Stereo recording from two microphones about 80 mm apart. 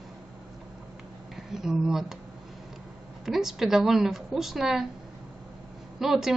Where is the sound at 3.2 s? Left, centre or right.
Centre.